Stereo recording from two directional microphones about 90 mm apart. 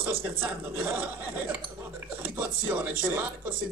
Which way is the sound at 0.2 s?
25° right (ahead or behind).